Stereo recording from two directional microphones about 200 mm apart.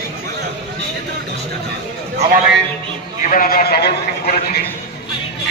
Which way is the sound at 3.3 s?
45° left (ahead or behind).